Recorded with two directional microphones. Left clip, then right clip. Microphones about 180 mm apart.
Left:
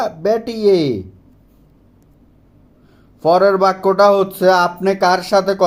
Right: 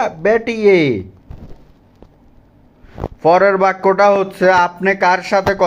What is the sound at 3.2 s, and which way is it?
Speech, centre (ahead or behind).